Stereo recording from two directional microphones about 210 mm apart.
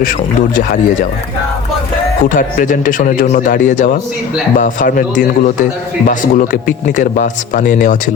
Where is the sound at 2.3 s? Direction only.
40° left (ahead or behind).